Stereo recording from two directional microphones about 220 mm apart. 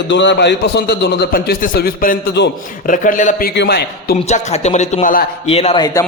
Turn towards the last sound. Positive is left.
turn(degrees=15)  # may be behind; listen again after turning